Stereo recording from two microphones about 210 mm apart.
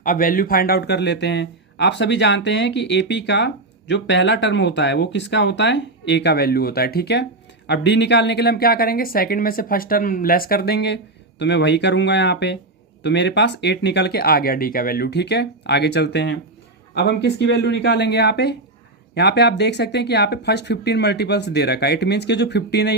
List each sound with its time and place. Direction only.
0.0 s a woman's voice: 40° left (ahead or behind)